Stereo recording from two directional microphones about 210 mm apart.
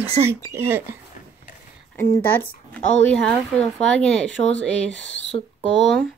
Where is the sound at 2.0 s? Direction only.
10° left (ahead or behind).